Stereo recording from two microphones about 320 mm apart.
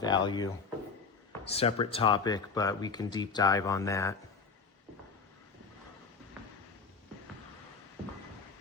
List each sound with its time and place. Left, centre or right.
0.0 s speech: centre